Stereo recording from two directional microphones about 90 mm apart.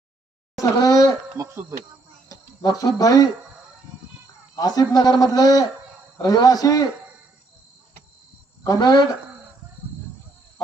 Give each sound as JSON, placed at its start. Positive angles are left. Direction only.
{"t": 0.6, "sound": "speech", "side_deg": 40}
{"t": 2.3, "sound": "speech", "side_deg": 45}
{"t": 4.5, "sound": "a man's voice", "side_deg": 45}
{"t": 8.6, "sound": "a man's voice", "side_deg": 45}